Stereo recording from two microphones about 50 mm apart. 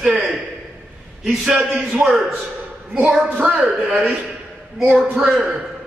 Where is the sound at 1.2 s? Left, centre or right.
Centre.